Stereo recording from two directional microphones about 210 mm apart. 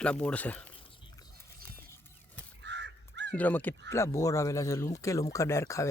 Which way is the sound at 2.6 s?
55° right (ahead or behind).